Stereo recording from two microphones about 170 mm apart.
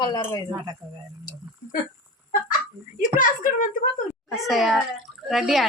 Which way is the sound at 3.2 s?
50° left (ahead or behind).